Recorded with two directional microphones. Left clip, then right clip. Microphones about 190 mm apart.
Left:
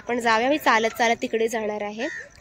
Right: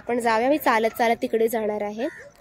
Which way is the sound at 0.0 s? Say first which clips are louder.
Even; 5° right (ahead or behind).